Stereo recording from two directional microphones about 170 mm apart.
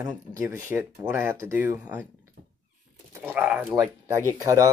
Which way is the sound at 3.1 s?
10° right (ahead or behind).